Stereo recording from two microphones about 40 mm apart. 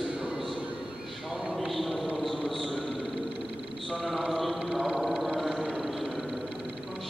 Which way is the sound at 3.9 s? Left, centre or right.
Centre.